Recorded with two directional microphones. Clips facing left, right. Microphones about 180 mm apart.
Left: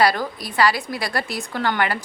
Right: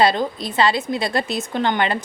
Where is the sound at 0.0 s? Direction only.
25° right (ahead or behind).